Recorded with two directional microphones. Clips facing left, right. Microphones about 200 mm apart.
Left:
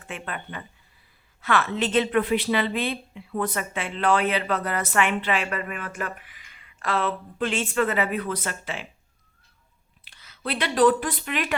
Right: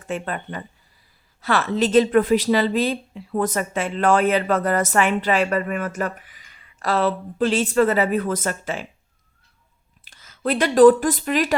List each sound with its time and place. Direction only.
0.1 s a woman's voice: 40° right (ahead or behind)
10.0 s speech: 45° right (ahead or behind)